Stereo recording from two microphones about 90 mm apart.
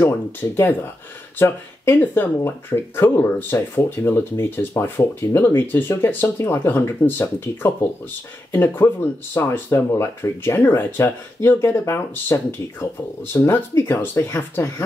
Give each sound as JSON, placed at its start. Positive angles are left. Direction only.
{"t": 0.0, "sound": "speech", "side_deg": 20}